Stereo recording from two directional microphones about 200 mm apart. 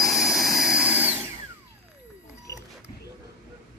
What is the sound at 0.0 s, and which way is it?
Drill, centre (ahead or behind).